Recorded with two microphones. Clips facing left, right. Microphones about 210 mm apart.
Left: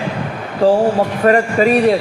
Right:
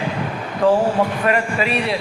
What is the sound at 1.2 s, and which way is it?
Speech, 40° left (ahead or behind).